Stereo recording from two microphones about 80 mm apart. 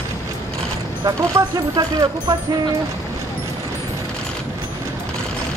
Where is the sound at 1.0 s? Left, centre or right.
Right.